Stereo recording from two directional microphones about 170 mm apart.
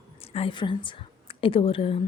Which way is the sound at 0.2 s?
35° left (ahead or behind).